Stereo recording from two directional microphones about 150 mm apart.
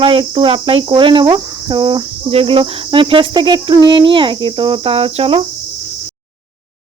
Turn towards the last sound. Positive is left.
turn(degrees=-40)  # may be behind; listen again after turning